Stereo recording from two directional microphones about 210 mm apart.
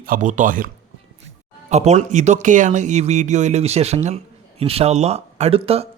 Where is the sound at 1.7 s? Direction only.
30° right (ahead or behind).